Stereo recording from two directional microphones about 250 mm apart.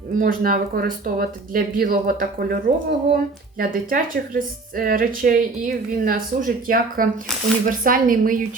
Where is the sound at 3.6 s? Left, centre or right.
Right.